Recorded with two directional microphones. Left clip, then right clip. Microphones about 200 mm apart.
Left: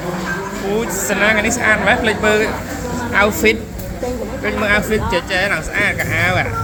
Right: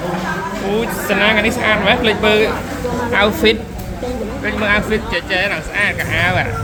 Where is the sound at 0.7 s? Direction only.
15° right (ahead or behind).